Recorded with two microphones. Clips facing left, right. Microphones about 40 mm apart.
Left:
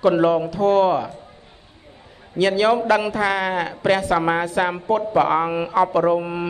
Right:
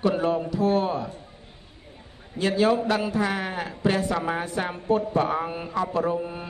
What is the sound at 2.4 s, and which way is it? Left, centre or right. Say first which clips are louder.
A man's voice: left 4 dB; left.